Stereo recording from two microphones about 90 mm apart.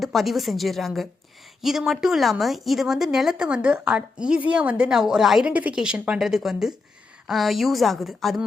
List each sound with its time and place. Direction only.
0.0 s a woman's voice: centre (ahead or behind)
5.5 s a woman's voice: 15° right (ahead or behind); by 8.4 s centre (ahead or behind)